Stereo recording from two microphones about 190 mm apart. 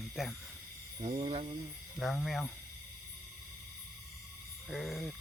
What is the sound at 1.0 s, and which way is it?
Speech, 35° right (ahead or behind).